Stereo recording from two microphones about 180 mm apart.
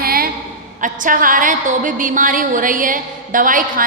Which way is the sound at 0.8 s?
50° right (ahead or behind).